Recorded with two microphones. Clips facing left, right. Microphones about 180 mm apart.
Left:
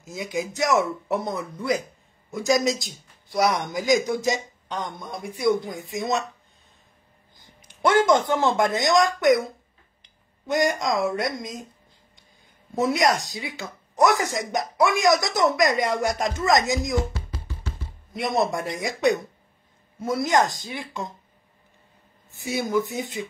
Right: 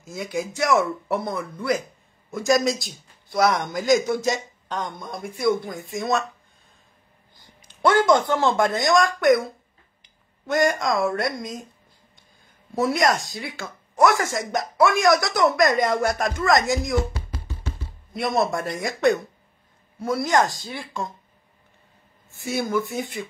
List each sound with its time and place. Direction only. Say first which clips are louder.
0.0 s speech: right 1 dB; 15° left (ahead or behind)
4.7 s speech: right 1 dB; centre (ahead or behind)
5.3 s speech: even; 15° left (ahead or behind)
7.6 s speech: right 1 dB; 15° left (ahead or behind)
12.7 s speech: even; 15° left (ahead or behind)
18.1 s speech: right 1 dB; 15° left (ahead or behind)
22.3 s speech: even; 15° left (ahead or behind)